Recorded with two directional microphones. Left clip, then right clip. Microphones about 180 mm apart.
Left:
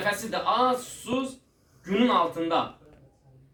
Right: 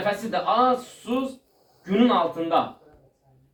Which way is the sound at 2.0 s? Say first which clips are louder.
Right 2 dB; 35° left (ahead or behind).